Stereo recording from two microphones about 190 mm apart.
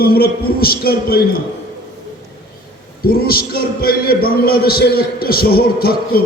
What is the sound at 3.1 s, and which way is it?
A man's voice, 50° left (ahead or behind).